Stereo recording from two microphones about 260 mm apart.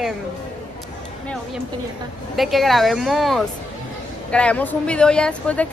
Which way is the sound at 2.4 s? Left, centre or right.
Centre.